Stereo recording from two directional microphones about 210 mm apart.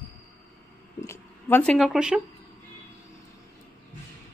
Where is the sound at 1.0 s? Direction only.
10° left (ahead or behind).